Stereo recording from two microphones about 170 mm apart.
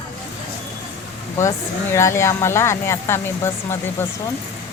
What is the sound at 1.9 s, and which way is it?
Speech, 15° left (ahead or behind).